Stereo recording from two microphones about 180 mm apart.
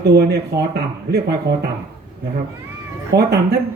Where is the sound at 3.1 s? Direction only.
65° right (ahead or behind).